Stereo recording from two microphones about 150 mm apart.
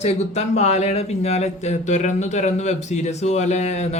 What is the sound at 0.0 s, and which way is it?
Speech, 45° left (ahead or behind).